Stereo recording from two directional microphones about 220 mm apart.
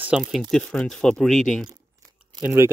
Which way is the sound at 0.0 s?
Centre (ahead or behind).